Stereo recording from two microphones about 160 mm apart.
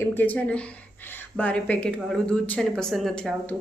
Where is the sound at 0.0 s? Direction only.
10° left (ahead or behind).